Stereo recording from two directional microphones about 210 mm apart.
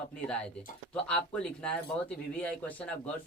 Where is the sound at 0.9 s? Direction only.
5° left (ahead or behind).